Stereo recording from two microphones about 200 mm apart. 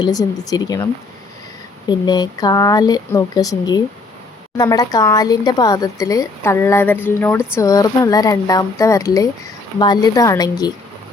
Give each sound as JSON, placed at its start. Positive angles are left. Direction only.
{"t": 0.0, "sound": "speech", "side_deg": 20}
{"t": 1.9, "sound": "speech", "side_deg": 20}